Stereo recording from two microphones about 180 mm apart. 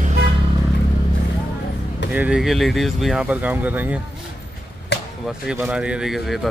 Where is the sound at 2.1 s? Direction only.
5° right (ahead or behind).